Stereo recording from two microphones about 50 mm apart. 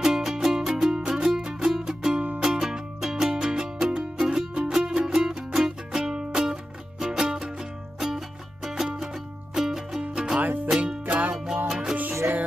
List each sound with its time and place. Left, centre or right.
0.0 s music: centre
8.6 s music: centre
11.1 s music: right
11.3 s music: centre